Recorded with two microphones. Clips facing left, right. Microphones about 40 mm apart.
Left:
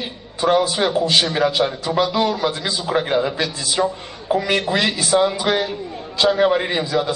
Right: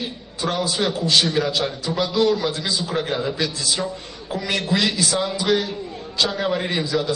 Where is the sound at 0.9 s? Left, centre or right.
Left.